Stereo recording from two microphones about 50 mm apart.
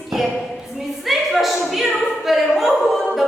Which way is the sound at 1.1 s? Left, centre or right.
Centre.